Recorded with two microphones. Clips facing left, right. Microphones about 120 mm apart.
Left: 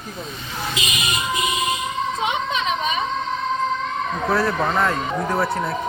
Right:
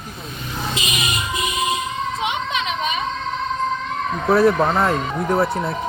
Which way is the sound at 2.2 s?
40° left (ahead or behind).